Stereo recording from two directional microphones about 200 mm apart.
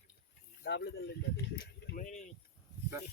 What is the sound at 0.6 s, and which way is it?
Speech, 65° left (ahead or behind).